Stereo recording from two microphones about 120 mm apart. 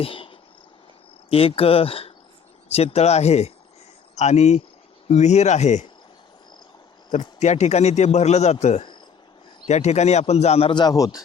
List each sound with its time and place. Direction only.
0.0 s cricket: 50° left (ahead or behind)
1.3 s a man's voice: 55° left (ahead or behind); by 5.8 s 75° left (ahead or behind)
7.1 s a man's voice: 75° left (ahead or behind)
10.7 s speech: 35° left (ahead or behind)